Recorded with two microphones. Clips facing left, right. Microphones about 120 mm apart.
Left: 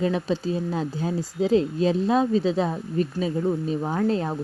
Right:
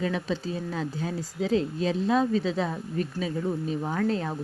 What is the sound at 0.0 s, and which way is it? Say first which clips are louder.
Speech: left 5 dB; 35° left (ahead or behind).